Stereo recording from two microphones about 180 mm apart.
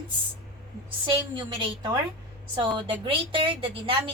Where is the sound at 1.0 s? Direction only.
30° right (ahead or behind).